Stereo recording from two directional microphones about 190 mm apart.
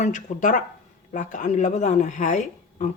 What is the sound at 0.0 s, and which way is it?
Speech, 40° left (ahead or behind).